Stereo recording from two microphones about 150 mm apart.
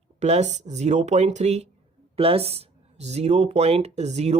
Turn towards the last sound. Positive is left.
turn(degrees=-45)  # may be behind; listen again after turning